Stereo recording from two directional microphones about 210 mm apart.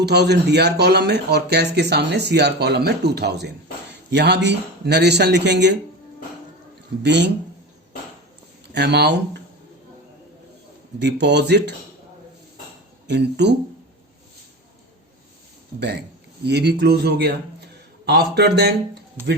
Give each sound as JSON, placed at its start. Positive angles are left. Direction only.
{"t": 0.0, "sound": "speech", "side_deg": -50}
{"t": 7.0, "sound": "a man's voice", "side_deg": -55}
{"t": 8.7, "sound": "speech", "side_deg": -50}
{"t": 11.0, "sound": "a man's voice", "side_deg": -55}
{"t": 13.1, "sound": "a man's voice", "side_deg": -55}
{"t": 15.8, "sound": "speech", "side_deg": -50}
{"t": 19.2, "sound": "speech", "side_deg": -10}